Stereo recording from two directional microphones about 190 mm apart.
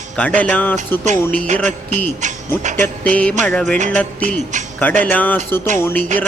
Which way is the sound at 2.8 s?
5° left (ahead or behind).